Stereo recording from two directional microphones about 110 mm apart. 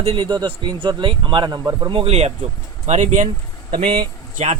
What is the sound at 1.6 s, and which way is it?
Speech, 25° right (ahead or behind).